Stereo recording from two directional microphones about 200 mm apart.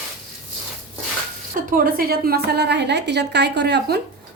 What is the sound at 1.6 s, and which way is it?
A woman's voice, 45° right (ahead or behind).